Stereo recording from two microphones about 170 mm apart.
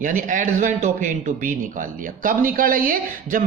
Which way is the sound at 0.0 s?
50° right (ahead or behind).